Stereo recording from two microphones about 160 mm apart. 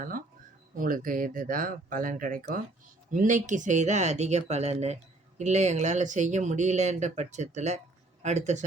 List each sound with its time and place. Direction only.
0.8 s speech: 60° right (ahead or behind)